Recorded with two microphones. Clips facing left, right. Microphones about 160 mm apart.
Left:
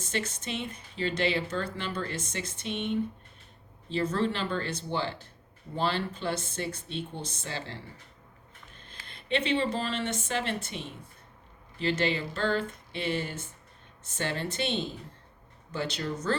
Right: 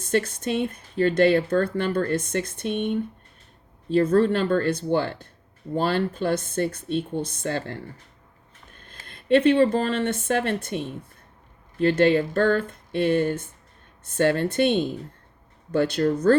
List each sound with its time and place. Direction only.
0.0 s speech: 55° right (ahead or behind)
8.8 s speech: 50° right (ahead or behind)